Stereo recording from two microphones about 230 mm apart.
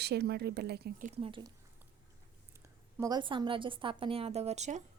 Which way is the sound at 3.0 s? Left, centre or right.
Centre.